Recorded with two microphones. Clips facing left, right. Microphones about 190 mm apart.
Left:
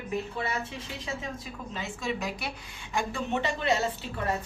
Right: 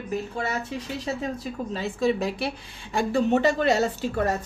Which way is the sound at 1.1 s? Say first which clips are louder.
Right 7 dB; 40° right (ahead or behind).